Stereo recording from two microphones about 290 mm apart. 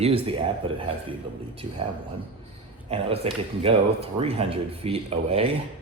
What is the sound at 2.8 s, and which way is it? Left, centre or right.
Speech, centre.